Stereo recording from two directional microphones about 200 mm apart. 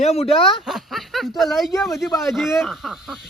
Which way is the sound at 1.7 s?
Centre (ahead or behind).